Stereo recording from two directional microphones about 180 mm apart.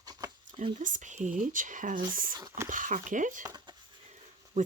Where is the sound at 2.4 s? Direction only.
15° right (ahead or behind).